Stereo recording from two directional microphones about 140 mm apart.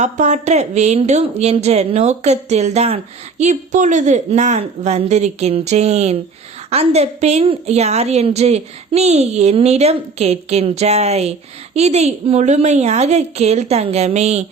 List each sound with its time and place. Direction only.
0.0 s a woman's voice: 55° right (ahead or behind)